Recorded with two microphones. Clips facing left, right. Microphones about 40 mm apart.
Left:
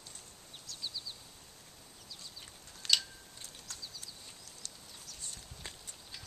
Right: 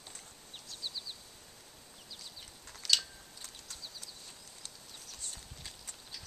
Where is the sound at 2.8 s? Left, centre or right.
Left.